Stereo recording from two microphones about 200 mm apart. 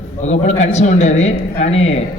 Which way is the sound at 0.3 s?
35° left (ahead or behind).